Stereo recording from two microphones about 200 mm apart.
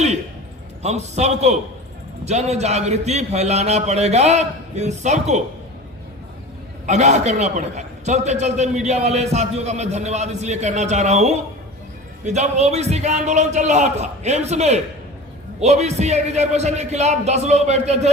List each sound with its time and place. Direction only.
0.8 s a man's voice: 35° right (ahead or behind)
6.8 s a man's voice: 35° right (ahead or behind)